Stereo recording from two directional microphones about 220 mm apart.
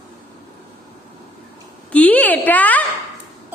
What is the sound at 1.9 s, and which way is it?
Speech, 5° left (ahead or behind).